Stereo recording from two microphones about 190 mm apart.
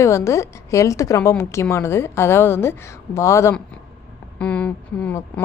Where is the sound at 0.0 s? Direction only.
15° left (ahead or behind).